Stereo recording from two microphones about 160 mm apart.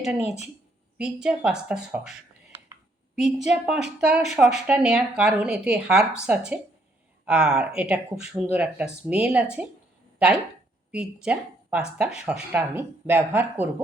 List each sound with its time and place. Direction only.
0.2 s speech: 40° left (ahead or behind)
0.9 s speech: 5° right (ahead or behind)
3.2 s speech: centre (ahead or behind)